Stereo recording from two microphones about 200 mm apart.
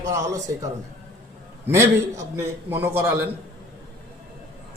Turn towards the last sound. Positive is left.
turn(degrees=-10)  # may be behind; listen again after turning